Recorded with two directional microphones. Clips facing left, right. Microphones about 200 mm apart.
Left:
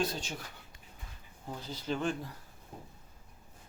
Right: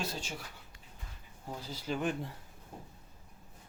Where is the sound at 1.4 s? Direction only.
5° right (ahead or behind).